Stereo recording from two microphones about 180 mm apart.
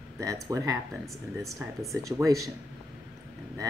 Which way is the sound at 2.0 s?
20° right (ahead or behind).